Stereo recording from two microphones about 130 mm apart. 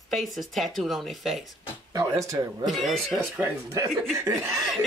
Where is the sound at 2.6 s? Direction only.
Centre (ahead or behind).